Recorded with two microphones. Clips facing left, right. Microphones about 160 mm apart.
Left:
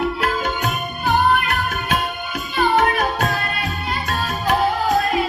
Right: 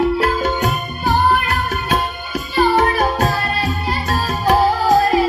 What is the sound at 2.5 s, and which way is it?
Music, 30° right (ahead or behind).